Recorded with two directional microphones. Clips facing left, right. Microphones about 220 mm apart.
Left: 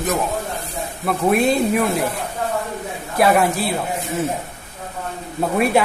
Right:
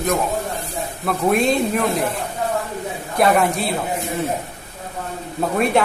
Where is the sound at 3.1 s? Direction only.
5° left (ahead or behind).